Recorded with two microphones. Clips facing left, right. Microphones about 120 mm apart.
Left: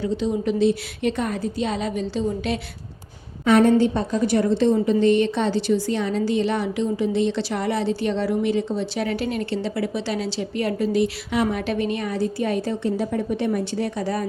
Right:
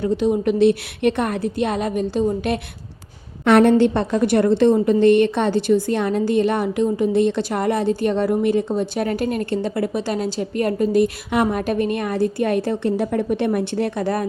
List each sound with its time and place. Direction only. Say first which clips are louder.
0.0 s a woman's voice: right 4 dB; 60° right (ahead or behind)
3.4 s a woman's voice: right 3 dB; 70° right (ahead or behind)